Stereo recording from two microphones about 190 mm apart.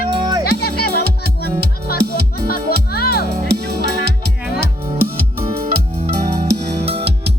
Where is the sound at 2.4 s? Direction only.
55° left (ahead or behind).